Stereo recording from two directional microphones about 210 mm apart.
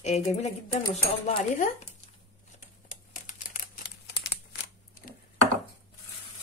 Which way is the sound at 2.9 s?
40° left (ahead or behind).